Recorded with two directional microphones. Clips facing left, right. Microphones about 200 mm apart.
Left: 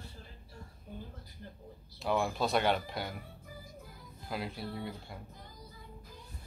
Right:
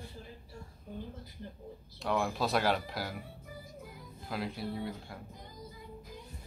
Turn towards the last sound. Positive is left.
turn(degrees=0)  # may be behind; listen again after turning